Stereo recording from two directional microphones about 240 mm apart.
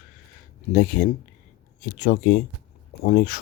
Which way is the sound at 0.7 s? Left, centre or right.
Left.